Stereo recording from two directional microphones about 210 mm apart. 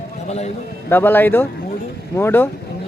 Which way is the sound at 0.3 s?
30° left (ahead or behind).